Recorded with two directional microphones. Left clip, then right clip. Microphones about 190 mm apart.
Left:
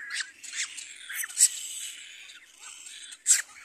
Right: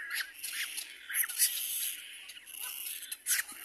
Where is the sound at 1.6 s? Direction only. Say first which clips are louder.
Left 1 dB; 30° right (ahead or behind).